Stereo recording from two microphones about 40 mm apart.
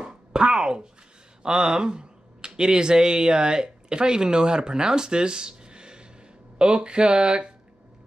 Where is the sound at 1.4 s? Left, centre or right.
Right.